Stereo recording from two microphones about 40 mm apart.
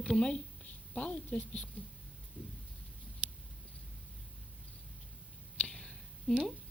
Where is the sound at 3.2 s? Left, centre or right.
Right.